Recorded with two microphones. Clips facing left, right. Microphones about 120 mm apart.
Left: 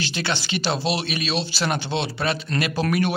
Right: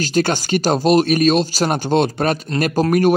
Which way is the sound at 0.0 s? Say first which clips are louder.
Right 9 dB; 45° right (ahead or behind).